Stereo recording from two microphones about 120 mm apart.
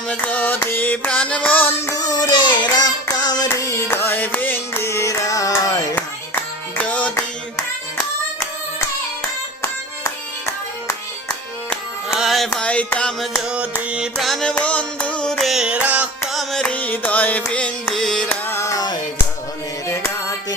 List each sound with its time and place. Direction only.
0.1 s music: 10° left (ahead or behind)
2.0 s child singing: 35° left (ahead or behind)
6.0 s clapping: 15° left (ahead or behind)
10.0 s music: 25° left (ahead or behind)
12.0 s music: 5° right (ahead or behind)
12.5 s music: 10° left (ahead or behind)
13.3 s music: 10° right (ahead or behind)
16.3 s carnatic music: centre (ahead or behind)
17.8 s carnatic music: 5° left (ahead or behind)
18.4 s music: 20° left (ahead or behind)